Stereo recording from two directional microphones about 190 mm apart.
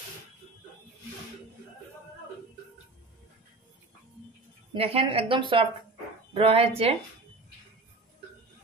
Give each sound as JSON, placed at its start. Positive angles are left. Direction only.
{"t": 4.7, "sound": "speech", "side_deg": -30}